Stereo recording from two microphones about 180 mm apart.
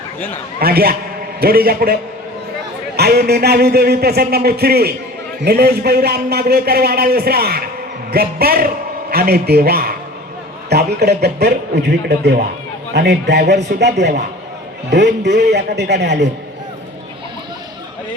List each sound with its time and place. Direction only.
0.6 s a man's voice: 60° right (ahead or behind); by 16.3 s 75° right (ahead or behind)